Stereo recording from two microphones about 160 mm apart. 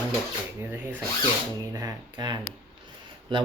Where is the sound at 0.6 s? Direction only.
15° right (ahead or behind).